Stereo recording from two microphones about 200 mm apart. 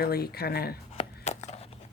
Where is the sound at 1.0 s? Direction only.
35° left (ahead or behind).